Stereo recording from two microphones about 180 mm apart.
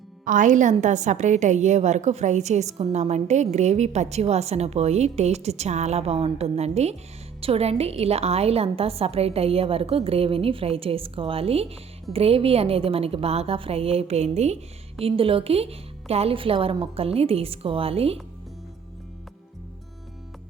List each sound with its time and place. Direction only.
0.3 s a woman's voice: 45° right (ahead or behind)